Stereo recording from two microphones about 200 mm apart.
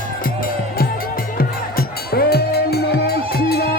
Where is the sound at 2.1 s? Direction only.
55° left (ahead or behind).